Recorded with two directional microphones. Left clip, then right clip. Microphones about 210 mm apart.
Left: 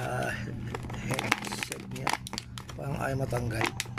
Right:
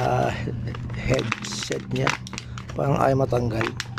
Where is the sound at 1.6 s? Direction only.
25° left (ahead or behind).